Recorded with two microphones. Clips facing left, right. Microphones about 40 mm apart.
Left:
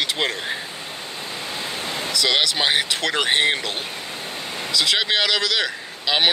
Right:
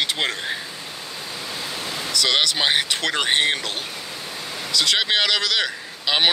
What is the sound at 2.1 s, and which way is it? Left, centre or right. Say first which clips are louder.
Speech: even; centre.